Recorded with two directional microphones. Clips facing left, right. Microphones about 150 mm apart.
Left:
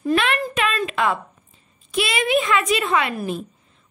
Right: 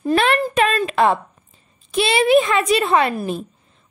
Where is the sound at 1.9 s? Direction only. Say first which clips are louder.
Right 6 dB; 30° right (ahead or behind).